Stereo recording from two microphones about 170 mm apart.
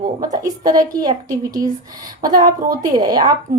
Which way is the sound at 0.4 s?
25° right (ahead or behind).